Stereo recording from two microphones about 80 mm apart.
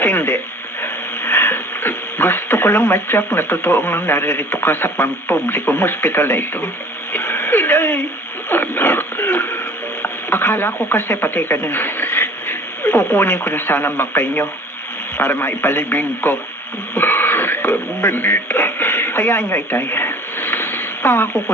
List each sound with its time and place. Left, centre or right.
0.0 s radio: left
0.8 s speech: left
7.1 s a sound: left
10.0 s speech: left
16.9 s throat clearing: left